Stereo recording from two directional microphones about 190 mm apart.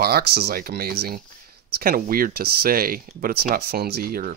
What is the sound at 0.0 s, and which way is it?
Speech, 55° right (ahead or behind).